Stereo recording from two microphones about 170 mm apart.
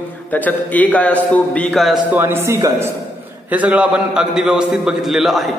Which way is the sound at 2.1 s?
15° right (ahead or behind).